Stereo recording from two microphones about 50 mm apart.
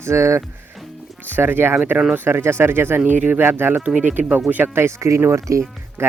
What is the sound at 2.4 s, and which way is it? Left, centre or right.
Speech, right.